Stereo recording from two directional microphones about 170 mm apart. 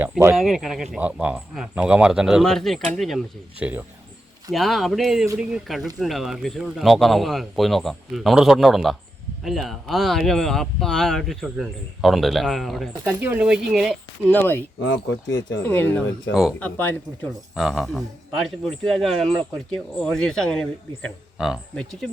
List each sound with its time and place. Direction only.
0.3 s speech: centre (ahead or behind)
14.3 s speech: 10° left (ahead or behind)
14.8 s speech: 90° left
15.6 s speech: 10° left (ahead or behind)
16.3 s speech: 5° right (ahead or behind)
16.6 s speech: 10° left (ahead or behind)
17.5 s speech: centre (ahead or behind)